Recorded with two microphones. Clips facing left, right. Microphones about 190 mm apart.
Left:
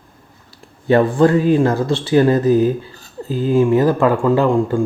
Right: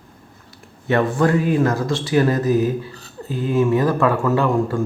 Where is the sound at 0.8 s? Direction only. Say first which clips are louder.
Left 5 dB; 30° left (ahead or behind).